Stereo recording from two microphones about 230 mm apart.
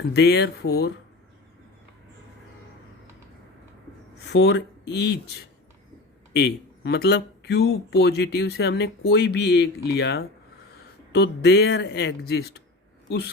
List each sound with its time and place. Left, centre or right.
0.1 s speech: left
4.3 s speech: left